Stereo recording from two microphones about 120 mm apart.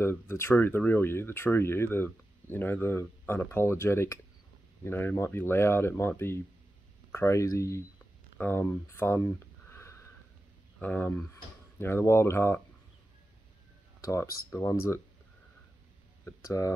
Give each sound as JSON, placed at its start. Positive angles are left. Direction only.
{"t": 0.0, "sound": "speech", "side_deg": 20}
{"t": 10.8, "sound": "speech", "side_deg": 10}
{"t": 14.0, "sound": "speech", "side_deg": 25}
{"t": 16.3, "sound": "speech", "side_deg": 25}